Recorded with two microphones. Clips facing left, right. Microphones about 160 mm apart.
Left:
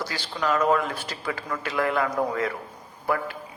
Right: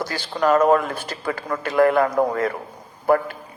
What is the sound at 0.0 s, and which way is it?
A man's voice, 45° right (ahead or behind).